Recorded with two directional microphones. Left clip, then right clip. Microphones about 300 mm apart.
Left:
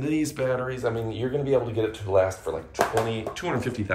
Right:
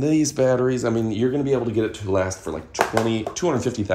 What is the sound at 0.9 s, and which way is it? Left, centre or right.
Speech, right.